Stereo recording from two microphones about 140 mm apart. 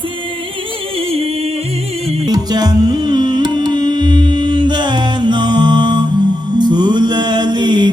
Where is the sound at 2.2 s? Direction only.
30° right (ahead or behind).